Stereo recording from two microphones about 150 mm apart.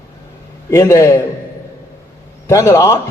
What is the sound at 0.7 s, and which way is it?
Speech, 20° left (ahead or behind).